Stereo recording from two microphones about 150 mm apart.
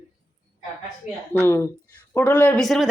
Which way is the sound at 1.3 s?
15° left (ahead or behind).